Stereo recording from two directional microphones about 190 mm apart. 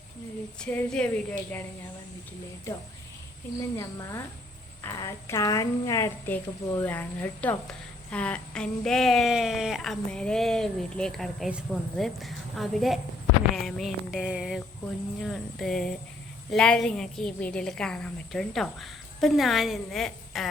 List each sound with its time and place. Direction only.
0.6 s speech: 5° left (ahead or behind)
3.8 s a woman's voice: 15° left (ahead or behind)